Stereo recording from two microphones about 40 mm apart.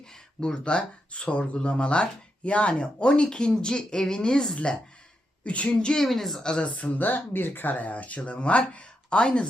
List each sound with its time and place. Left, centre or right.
0.3 s speech: left
5.5 s speech: left
6.0 s a woman's voice: centre
6.4 s speech: left